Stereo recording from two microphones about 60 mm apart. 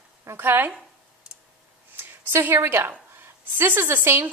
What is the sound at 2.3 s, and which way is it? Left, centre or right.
A woman's voice, right.